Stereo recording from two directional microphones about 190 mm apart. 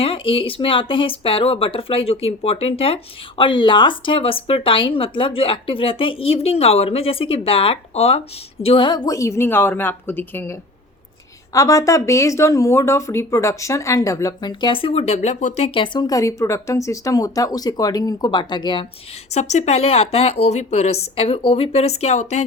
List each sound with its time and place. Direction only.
0.0 s speech: 30° left (ahead or behind)
19.3 s a woman's voice: 35° left (ahead or behind)